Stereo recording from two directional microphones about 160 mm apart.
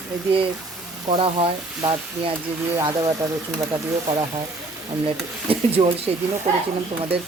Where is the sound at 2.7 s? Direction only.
20° right (ahead or behind).